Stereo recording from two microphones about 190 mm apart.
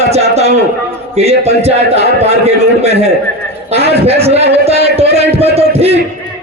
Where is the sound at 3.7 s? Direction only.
35° right (ahead or behind).